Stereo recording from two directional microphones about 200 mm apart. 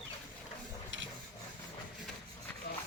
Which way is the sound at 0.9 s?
70° right (ahead or behind).